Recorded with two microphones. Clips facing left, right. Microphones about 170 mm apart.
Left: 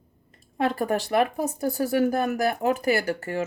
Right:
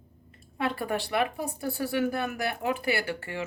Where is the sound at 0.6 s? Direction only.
45° left (ahead or behind).